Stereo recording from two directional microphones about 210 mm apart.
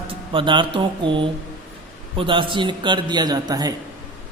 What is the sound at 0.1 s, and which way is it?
A man's voice, 25° right (ahead or behind).